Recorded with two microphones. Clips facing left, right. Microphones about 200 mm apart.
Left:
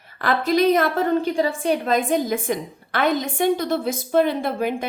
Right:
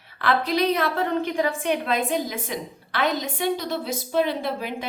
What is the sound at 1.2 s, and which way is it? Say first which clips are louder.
A woman's voice: left 3 dB; 35° left (ahead or behind).